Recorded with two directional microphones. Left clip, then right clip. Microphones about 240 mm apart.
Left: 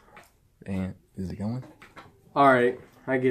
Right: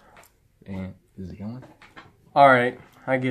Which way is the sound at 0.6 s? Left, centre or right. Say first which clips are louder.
Left 3 dB; left.